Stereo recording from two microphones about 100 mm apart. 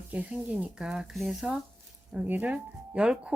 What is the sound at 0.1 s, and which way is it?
Speech, 15° right (ahead or behind).